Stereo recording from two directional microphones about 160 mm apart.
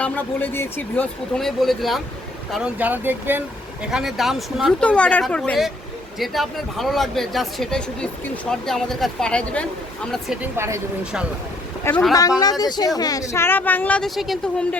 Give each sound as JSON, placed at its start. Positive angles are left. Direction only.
{"t": 0.0, "sound": "speech", "side_deg": 10}
{"t": 3.9, "sound": "speech", "side_deg": 0}
{"t": 11.9, "sound": "speech", "side_deg": 10}
{"t": 12.4, "sound": "speech", "side_deg": 25}